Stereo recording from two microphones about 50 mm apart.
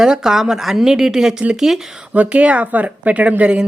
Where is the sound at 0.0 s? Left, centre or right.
Centre.